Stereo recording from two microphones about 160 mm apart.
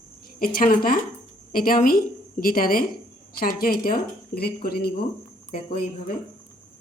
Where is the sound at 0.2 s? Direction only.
65° left (ahead or behind).